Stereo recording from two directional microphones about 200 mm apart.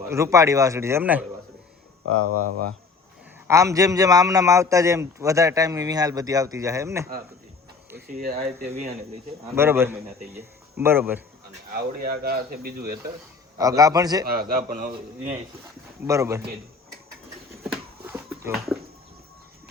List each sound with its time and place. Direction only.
0.1 s a man's voice: 15° right (ahead or behind)
3.4 s a man's voice: 15° right (ahead or behind)
8.2 s speech: 45° right (ahead or behind)
9.6 s a man's voice: 10° right (ahead or behind)
11.7 s speech: 50° right (ahead or behind)
13.6 s a man's voice: 15° right (ahead or behind)
14.3 s speech: 45° right (ahead or behind)
16.0 s a man's voice: 15° right (ahead or behind)
17.7 s a sound: 10° right (ahead or behind)